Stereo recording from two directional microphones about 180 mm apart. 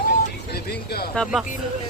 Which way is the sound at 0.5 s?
60° left (ahead or behind).